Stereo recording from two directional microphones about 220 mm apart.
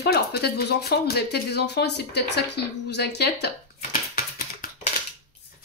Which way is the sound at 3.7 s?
30° left (ahead or behind).